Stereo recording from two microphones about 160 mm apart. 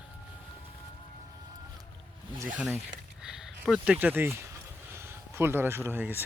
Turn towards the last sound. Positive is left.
turn(degrees=-15)  # may be behind; listen again after turning